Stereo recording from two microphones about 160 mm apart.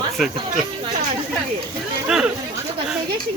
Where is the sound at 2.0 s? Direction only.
5° right (ahead or behind).